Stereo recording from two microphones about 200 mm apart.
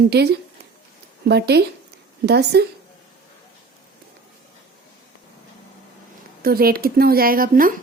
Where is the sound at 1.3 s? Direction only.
55° right (ahead or behind).